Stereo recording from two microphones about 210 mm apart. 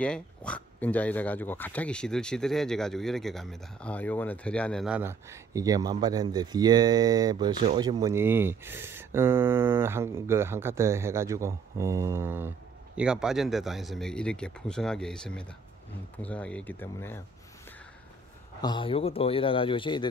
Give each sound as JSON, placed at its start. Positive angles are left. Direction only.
{"t": 0.0, "sound": "speech", "side_deg": 5}
{"t": 18.6, "sound": "speech", "side_deg": 20}